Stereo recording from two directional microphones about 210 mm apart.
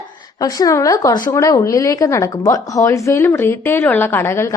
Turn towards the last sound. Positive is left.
turn(degrees=10)  # may be behind; listen again after turning